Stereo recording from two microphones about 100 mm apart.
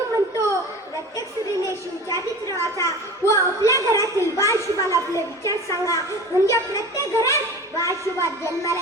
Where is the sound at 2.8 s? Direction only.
30° left (ahead or behind).